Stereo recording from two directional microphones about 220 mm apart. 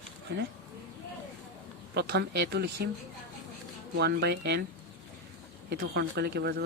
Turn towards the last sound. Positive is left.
turn(degrees=-45)  # may be behind; listen again after turning